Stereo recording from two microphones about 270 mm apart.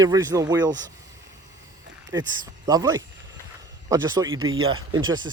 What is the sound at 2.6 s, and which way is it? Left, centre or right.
Speech, centre.